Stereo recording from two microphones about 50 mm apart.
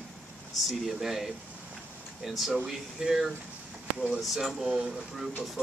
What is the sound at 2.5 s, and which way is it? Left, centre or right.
Speech, centre.